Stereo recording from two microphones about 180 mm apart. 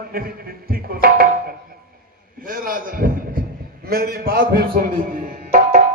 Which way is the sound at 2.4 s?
50° right (ahead or behind).